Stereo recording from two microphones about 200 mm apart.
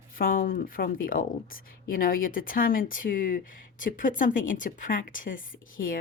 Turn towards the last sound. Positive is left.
turn(degrees=45)  # may be behind; listen again after turning